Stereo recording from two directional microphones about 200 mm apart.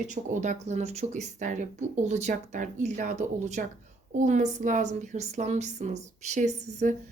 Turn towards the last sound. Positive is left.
turn(degrees=-35)  # may be behind; listen again after turning